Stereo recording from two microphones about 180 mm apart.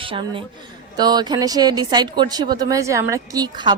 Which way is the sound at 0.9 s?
20° right (ahead or behind).